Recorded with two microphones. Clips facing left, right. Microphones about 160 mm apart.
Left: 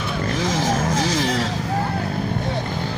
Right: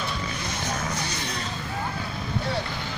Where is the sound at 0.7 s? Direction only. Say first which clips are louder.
Left 9 dB; 90° left.